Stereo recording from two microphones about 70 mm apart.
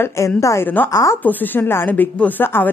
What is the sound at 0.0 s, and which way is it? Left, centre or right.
A woman's voice, left.